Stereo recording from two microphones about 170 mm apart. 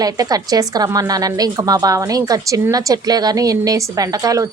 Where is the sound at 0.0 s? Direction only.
20° right (ahead or behind).